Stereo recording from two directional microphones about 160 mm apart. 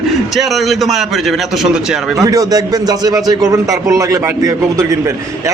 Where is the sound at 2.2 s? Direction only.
20° right (ahead or behind).